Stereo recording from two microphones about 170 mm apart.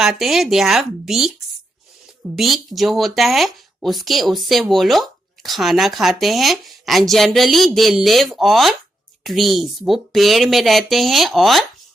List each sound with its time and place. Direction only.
0.0 s speech: centre (ahead or behind)
2.3 s speech: centre (ahead or behind)